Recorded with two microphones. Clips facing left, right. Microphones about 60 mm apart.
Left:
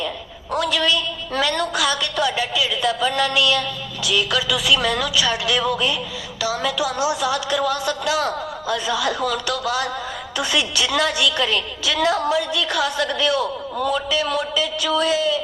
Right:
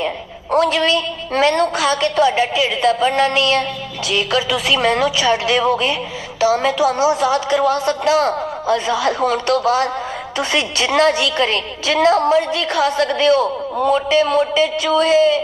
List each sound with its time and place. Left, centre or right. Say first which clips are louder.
0.5 s a woman's voice: right 5 dB; right